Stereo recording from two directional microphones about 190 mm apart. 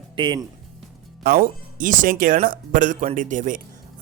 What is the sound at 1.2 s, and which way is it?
A man's voice, 50° right (ahead or behind).